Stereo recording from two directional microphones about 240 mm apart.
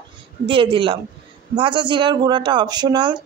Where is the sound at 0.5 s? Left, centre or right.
Right.